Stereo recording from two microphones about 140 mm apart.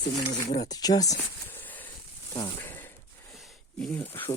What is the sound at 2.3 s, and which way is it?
Speech, 20° left (ahead or behind).